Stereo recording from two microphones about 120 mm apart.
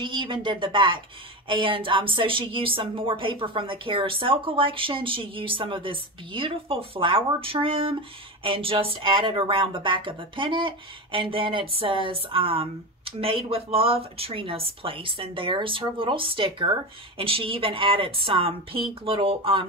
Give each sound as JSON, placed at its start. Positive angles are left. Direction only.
{"t": 0.0, "sound": "speech", "side_deg": -40}